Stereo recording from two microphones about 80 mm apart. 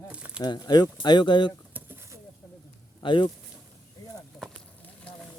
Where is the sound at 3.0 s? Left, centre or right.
Left.